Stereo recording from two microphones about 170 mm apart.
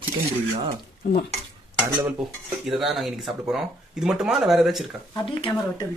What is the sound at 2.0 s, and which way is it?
Speech, 5° right (ahead or behind).